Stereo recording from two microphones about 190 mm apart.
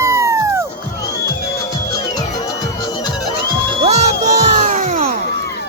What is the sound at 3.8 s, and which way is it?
Music, 35° right (ahead or behind).